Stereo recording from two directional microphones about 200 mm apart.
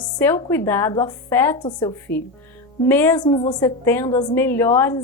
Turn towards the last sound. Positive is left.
turn(degrees=15)  # may be behind; listen again after turning